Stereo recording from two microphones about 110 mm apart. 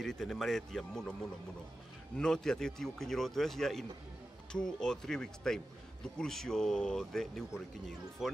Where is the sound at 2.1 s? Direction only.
5° left (ahead or behind).